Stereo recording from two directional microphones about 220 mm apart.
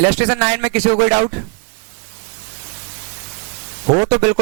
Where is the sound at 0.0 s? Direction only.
15° right (ahead or behind).